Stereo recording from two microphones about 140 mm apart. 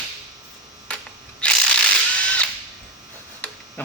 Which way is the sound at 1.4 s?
5° left (ahead or behind).